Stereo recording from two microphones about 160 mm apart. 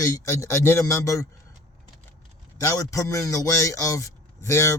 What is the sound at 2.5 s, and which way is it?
Speech, 20° left (ahead or behind).